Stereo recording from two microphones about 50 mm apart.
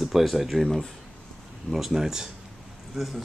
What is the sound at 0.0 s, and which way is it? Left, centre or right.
Speech, centre.